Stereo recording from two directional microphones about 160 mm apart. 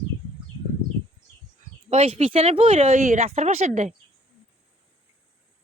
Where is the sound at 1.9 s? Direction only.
40° right (ahead or behind).